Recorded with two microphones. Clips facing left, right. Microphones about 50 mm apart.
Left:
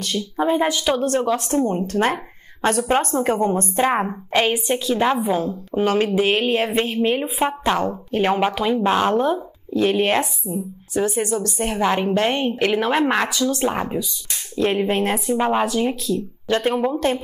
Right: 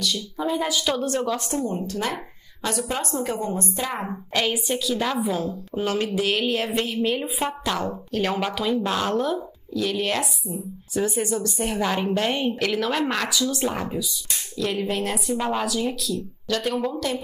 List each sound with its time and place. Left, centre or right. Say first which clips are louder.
0.0 s a woman's voice: left 5 dB; left
11.0 s a woman's voice: left 3 dB; left